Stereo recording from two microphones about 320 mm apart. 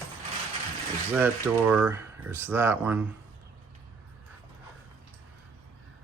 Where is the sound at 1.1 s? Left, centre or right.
Centre.